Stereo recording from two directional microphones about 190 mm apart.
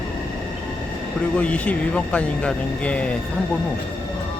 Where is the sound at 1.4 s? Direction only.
5° left (ahead or behind).